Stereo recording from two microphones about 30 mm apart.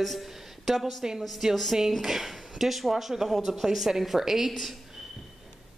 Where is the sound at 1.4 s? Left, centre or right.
Centre.